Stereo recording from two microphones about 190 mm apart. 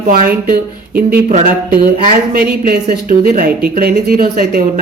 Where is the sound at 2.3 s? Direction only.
50° right (ahead or behind).